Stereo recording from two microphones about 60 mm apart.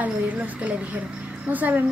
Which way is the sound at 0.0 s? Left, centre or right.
Right.